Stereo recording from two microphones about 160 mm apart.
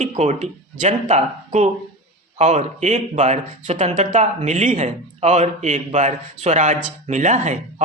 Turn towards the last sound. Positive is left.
turn(degrees=-45)  # may be behind; listen again after turning